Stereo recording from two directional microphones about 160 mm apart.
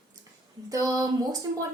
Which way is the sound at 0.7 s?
20° right (ahead or behind).